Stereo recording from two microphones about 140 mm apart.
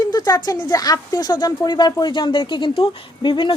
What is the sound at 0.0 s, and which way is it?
A woman's voice, 30° left (ahead or behind).